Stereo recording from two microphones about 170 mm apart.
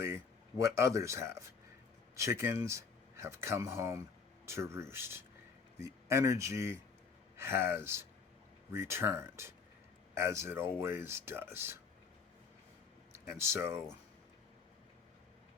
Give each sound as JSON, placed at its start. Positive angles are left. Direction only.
{"t": 0.6, "sound": "speech", "side_deg": -15}
{"t": 13.1, "sound": "speech", "side_deg": -15}